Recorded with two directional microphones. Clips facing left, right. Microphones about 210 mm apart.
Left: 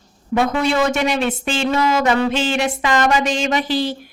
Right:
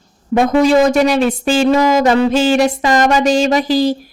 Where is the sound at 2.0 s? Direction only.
35° right (ahead or behind).